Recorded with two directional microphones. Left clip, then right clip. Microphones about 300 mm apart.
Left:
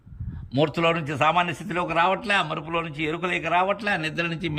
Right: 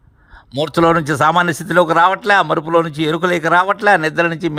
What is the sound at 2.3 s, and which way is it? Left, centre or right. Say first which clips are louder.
Speech: right 11 dB; right.